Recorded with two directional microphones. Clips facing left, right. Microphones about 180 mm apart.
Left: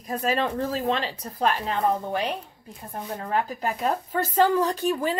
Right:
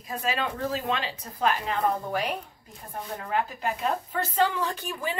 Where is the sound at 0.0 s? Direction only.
40° left (ahead or behind).